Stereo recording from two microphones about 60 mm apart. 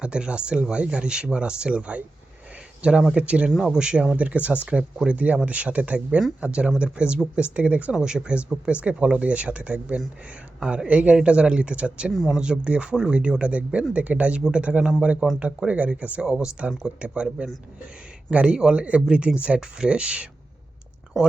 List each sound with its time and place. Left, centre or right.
0.0 s a man's voice: centre
4.2 s a man's voice: right
7.9 s a man's voice: centre
12.1 s speech: centre
12.4 s a man's voice: centre